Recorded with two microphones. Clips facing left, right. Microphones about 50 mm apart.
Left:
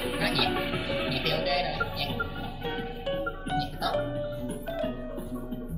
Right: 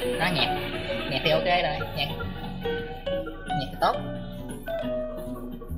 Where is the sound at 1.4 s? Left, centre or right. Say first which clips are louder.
Right 4 dB; right.